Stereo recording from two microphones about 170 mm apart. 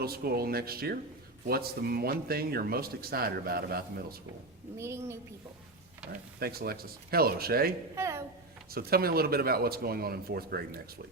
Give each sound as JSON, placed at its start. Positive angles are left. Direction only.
{"t": 0.0, "sound": "speech", "side_deg": -65}
{"t": 4.8, "sound": "a woman's voice", "side_deg": -15}
{"t": 6.4, "sound": "speech", "side_deg": -65}
{"t": 7.9, "sound": "a sound", "side_deg": -15}
{"t": 8.7, "sound": "speech", "side_deg": -65}